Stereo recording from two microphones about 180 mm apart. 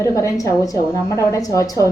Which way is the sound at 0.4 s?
20° left (ahead or behind).